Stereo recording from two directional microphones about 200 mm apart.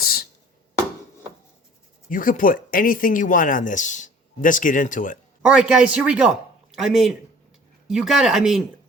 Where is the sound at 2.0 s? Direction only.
40° left (ahead or behind).